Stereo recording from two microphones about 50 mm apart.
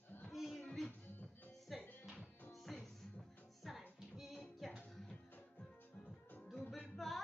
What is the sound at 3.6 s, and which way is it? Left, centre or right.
Music, centre.